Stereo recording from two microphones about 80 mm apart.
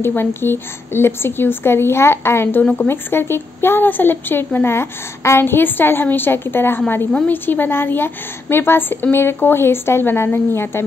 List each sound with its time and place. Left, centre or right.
0.0 s speech: left
2.6 s speech: centre
2.9 s speech: left